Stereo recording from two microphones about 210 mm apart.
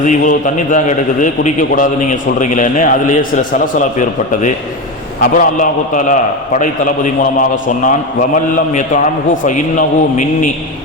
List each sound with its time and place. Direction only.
0.0 s a man's voice: 35° left (ahead or behind)